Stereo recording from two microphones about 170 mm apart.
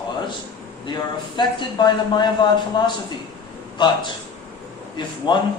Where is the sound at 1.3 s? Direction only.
25° left (ahead or behind).